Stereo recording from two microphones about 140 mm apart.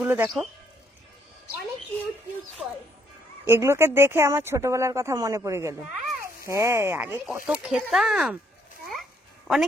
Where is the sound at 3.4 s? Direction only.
15° right (ahead or behind).